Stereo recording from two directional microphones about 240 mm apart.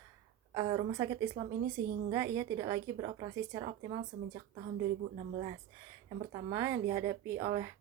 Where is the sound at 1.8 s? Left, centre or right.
Right.